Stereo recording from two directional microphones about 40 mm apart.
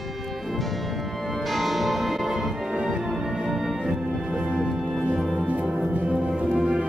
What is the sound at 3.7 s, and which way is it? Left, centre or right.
Music, centre.